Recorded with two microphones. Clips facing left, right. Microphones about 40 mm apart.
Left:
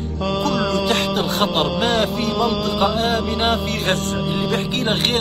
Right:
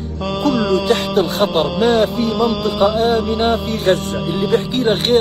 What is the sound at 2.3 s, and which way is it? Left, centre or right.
Music, centre.